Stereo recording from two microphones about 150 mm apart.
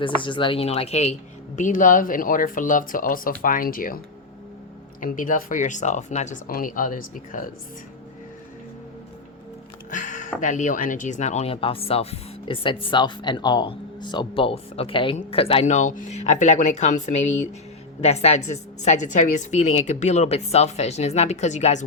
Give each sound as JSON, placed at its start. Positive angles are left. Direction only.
{"t": 0.0, "sound": "speech", "side_deg": 35}
{"t": 1.5, "sound": "speech", "side_deg": 60}
{"t": 6.5, "sound": "speech", "side_deg": 65}
{"t": 9.9, "sound": "music", "side_deg": 60}
{"t": 10.4, "sound": "speech", "side_deg": 55}